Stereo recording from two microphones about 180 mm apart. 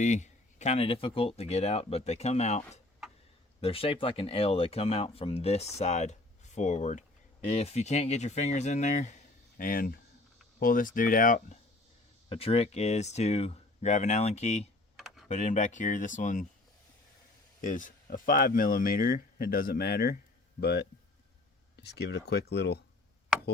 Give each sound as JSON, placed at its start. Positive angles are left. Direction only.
{"t": 0.0, "sound": "speech", "side_deg": 40}
{"t": 12.3, "sound": "speech", "side_deg": 35}
{"t": 14.9, "sound": "computer keyboard", "side_deg": 0}
{"t": 15.3, "sound": "speech", "side_deg": 40}
{"t": 17.6, "sound": "speech", "side_deg": 45}
{"t": 21.8, "sound": "speech", "side_deg": 70}